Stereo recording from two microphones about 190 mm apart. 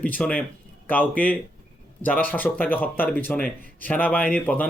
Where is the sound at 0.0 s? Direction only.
10° left (ahead or behind).